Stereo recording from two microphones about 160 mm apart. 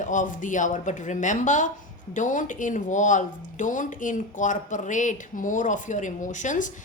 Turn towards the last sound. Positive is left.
turn(degrees=50)  # may be behind; listen again after turning